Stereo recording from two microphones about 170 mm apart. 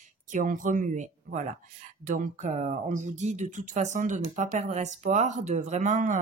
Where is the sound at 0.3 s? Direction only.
50° right (ahead or behind).